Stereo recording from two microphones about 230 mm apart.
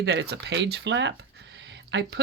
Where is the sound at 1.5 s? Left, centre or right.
Right.